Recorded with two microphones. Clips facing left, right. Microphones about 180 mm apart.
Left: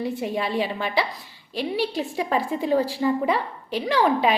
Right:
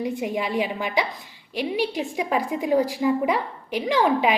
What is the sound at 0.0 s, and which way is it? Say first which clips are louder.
A woman's voice: even; 15° right (ahead or behind).